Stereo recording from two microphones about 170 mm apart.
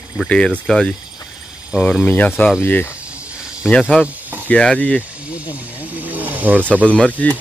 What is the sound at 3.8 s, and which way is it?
Speech, 5° right (ahead or behind).